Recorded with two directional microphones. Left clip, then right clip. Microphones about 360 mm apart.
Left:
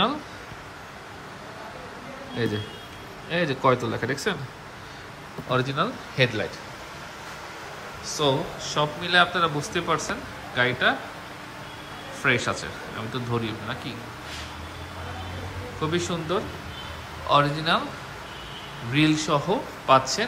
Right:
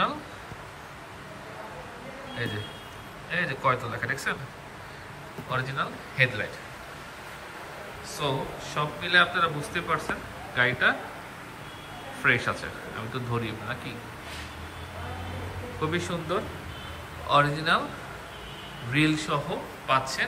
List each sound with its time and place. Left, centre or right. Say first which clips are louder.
3.3 s speech: left 4 dB; centre
5.5 s speech: left 5 dB; centre
8.1 s a man's voice: left 6 dB; centre
12.2 s a man's voice: left 1 dB; centre
15.8 s a man's voice: left 3 dB; centre
18.9 s a man's voice: left 3 dB; centre